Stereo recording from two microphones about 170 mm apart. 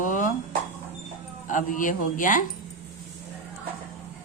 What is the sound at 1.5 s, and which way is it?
Speech, 50° left (ahead or behind).